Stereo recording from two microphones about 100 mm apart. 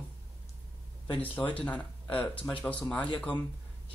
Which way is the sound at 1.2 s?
15° left (ahead or behind).